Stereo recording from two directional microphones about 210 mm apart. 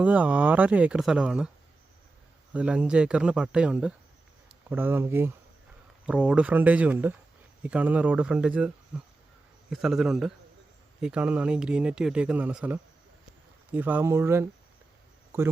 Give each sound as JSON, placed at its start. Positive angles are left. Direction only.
{"t": 0.0, "sound": "speech", "side_deg": -5}
{"t": 2.5, "sound": "speech", "side_deg": -5}